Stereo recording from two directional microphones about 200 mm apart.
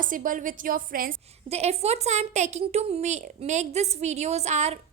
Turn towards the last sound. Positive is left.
turn(degrees=-35)  # may be behind; listen again after turning